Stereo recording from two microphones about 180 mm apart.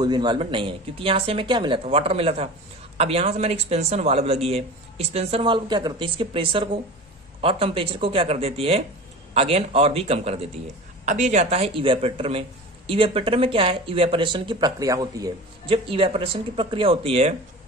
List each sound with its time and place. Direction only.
0.0 s a man's voice: 25° right (ahead or behind)